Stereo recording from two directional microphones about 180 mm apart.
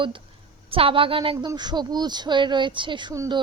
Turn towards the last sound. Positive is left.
turn(degrees=-20)  # may be behind; listen again after turning